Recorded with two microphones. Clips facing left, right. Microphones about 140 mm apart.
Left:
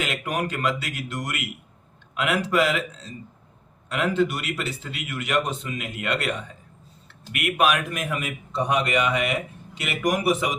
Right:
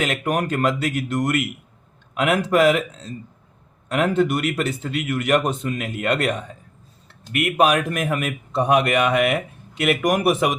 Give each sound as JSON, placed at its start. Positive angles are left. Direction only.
{"t": 0.0, "sound": "a man's voice", "side_deg": -45}
{"t": 7.9, "sound": "speech", "side_deg": -55}